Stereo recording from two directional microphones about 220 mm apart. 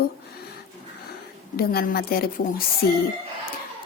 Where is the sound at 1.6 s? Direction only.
45° left (ahead or behind).